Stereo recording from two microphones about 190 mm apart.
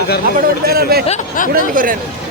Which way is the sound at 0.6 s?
55° right (ahead or behind).